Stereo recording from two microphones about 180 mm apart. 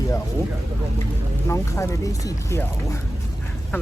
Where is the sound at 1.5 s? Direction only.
15° left (ahead or behind).